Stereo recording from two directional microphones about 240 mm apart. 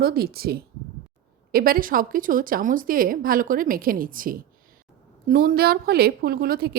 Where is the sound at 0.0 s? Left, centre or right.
Right.